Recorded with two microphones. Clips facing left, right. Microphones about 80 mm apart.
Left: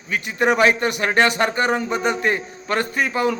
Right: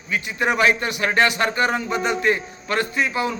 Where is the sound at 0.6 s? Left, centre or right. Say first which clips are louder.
Left 1 dB; left.